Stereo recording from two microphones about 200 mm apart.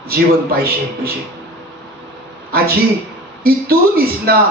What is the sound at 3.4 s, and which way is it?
Speech, 50° right (ahead or behind).